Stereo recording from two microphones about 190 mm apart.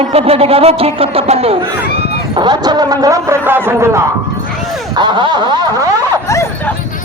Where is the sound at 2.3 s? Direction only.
20° right (ahead or behind).